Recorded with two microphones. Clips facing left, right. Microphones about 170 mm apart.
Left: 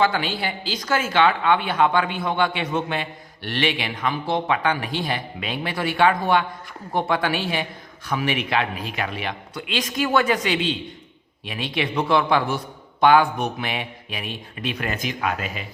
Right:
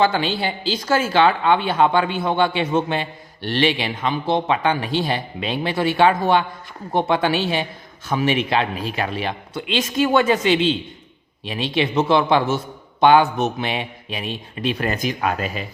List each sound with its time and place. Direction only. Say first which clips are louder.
0.0 s speech: right 3 dB; 30° right (ahead or behind)